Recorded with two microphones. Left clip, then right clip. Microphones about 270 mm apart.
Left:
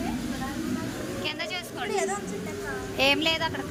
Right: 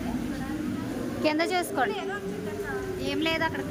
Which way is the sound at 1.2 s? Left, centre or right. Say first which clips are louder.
Right 8 dB; right.